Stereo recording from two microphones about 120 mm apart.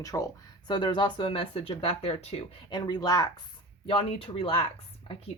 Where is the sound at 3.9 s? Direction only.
50° left (ahead or behind).